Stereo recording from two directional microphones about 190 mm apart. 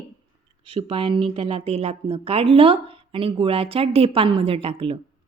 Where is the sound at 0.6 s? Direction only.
30° right (ahead or behind).